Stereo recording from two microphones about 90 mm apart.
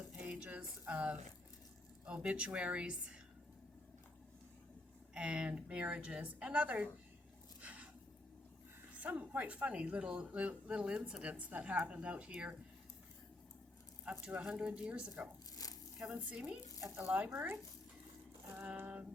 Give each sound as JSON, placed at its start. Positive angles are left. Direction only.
{"t": 0.3, "sound": "a sound", "side_deg": -15}
{"t": 2.0, "sound": "speech", "side_deg": -10}
{"t": 5.1, "sound": "speech", "side_deg": -10}
{"t": 7.6, "sound": "squish", "side_deg": -15}
{"t": 9.0, "sound": "speech", "side_deg": -20}
{"t": 14.0, "sound": "speech", "side_deg": -15}
{"t": 15.6, "sound": "a sound", "side_deg": 40}
{"t": 16.0, "sound": "speech", "side_deg": -10}
{"t": 18.5, "sound": "speech", "side_deg": -20}